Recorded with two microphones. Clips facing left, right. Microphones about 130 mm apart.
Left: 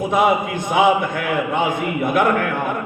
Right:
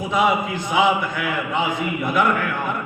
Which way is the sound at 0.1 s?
50° left (ahead or behind).